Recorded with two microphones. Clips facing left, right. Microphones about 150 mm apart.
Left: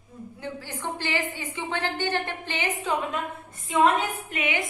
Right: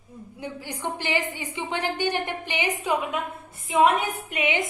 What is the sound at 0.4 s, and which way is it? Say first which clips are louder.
A woman's voice: right 2 dB; 15° right (ahead or behind).